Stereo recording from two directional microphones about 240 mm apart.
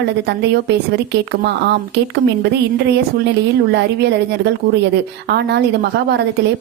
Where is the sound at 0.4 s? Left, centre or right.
Right.